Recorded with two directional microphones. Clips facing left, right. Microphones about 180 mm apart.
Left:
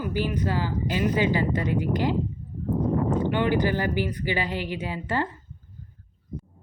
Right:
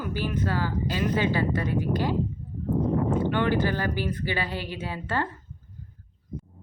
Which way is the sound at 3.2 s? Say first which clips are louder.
Left 1 dB; 15° left (ahead or behind).